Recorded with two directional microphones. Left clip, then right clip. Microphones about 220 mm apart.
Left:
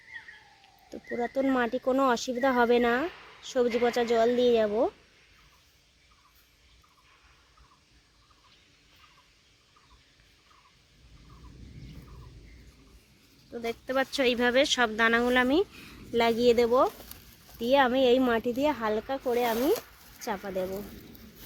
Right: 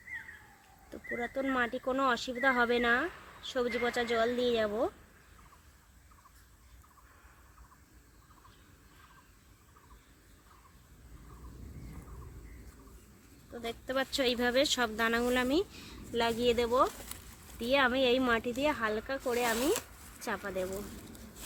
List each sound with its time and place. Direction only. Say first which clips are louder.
0.9 s speech: left 5 dB; 40° left (ahead or behind)
13.5 s speech: left 5 dB; 30° left (ahead or behind)